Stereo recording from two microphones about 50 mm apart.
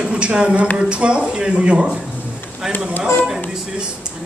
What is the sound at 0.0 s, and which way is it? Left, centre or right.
Speech, centre.